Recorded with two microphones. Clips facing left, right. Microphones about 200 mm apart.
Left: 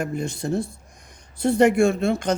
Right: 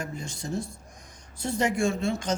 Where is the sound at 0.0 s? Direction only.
60° left (ahead or behind).